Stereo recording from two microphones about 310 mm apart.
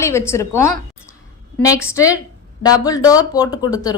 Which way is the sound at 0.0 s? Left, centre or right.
Centre.